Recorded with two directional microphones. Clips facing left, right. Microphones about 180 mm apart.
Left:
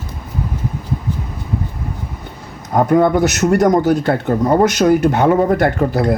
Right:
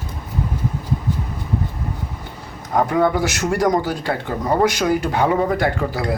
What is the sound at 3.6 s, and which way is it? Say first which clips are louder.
Speech: left 6 dB; 45° left (ahead or behind).